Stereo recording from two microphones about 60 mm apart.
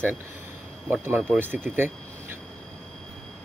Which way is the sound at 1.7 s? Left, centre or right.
Right.